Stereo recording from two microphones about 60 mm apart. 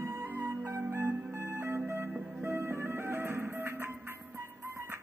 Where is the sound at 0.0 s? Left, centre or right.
Right.